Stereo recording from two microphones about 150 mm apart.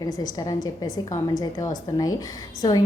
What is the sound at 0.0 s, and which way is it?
A woman's voice, 25° left (ahead or behind).